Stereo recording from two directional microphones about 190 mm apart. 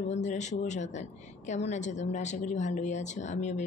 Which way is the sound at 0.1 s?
40° left (ahead or behind).